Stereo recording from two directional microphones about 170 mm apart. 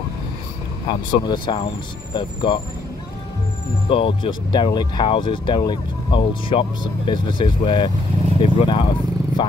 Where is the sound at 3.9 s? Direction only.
30° left (ahead or behind).